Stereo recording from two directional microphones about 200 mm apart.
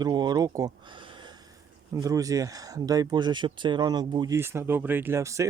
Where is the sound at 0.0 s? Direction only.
20° right (ahead or behind).